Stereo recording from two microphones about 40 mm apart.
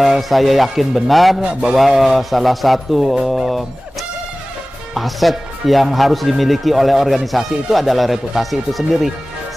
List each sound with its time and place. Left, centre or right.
0.0 s speech: centre
1.4 s a sound: right
1.8 s speech: centre
4.9 s speech: centre